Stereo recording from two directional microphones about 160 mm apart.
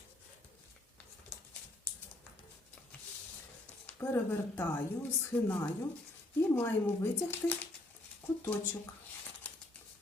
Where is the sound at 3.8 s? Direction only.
15° left (ahead or behind).